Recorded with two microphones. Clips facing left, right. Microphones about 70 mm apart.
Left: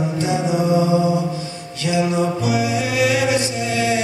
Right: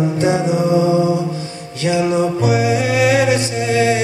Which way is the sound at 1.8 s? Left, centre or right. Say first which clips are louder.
Right 3 dB; right.